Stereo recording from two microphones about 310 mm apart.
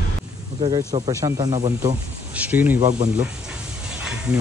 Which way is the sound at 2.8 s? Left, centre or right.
Right.